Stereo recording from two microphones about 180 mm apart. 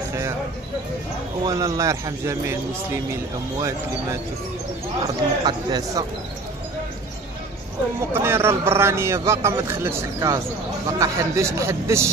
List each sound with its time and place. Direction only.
1.5 s a man's voice: 20° right (ahead or behind)
8.1 s speech: 15° right (ahead or behind)